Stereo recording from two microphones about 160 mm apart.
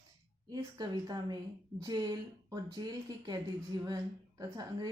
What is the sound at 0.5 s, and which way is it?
Speech, 25° right (ahead or behind).